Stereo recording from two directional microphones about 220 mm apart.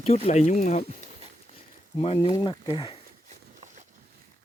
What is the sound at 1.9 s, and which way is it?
Speech, 25° left (ahead or behind).